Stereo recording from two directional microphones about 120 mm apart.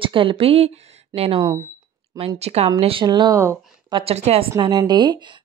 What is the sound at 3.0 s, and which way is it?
A woman's voice, 35° right (ahead or behind).